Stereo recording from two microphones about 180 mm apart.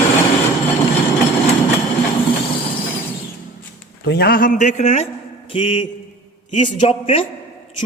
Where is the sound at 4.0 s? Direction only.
60° left (ahead or behind); by 5.1 s 35° left (ahead or behind).